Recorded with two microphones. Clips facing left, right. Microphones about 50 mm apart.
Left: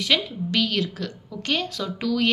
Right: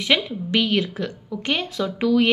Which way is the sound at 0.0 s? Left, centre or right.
Right.